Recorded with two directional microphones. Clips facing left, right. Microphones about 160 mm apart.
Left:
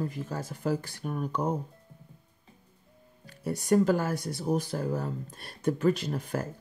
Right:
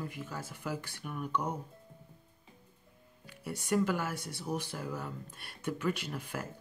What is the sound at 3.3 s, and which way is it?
Speech, 40° left (ahead or behind).